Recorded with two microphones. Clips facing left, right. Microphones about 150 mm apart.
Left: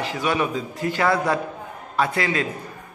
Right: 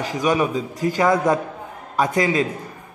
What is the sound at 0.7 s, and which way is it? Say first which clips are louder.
Speech: right 3 dB; 40° right (ahead or behind).